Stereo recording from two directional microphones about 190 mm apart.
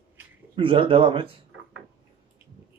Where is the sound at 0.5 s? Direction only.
25° right (ahead or behind).